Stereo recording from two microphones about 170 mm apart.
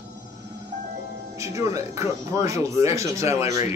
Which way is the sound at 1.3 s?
20° right (ahead or behind).